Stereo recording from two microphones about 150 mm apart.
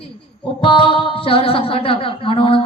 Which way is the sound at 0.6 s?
35° left (ahead or behind).